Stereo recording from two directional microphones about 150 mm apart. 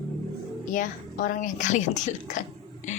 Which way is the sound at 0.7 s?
60° left (ahead or behind).